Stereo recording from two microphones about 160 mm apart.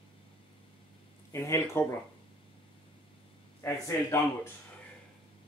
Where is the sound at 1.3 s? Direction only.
20° left (ahead or behind).